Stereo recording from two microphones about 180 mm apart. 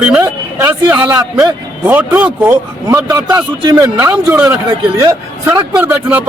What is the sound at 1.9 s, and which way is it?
Speech, 10° right (ahead or behind).